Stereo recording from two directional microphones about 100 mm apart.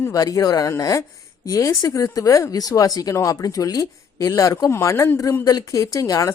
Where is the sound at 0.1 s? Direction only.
35° left (ahead or behind).